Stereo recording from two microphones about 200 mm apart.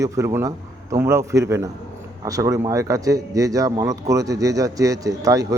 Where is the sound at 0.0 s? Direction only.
15° right (ahead or behind).